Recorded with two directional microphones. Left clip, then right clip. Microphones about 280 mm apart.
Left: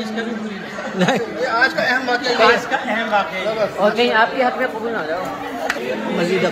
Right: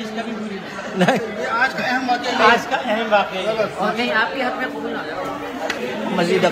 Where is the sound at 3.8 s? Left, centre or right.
Left.